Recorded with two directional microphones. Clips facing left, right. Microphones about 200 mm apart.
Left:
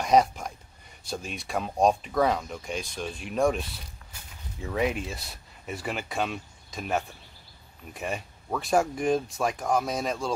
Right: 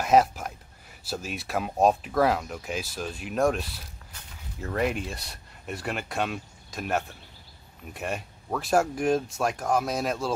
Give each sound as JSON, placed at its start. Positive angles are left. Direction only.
{"t": 0.0, "sound": "speech", "side_deg": -5}